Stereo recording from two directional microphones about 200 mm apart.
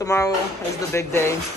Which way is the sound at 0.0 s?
15° left (ahead or behind).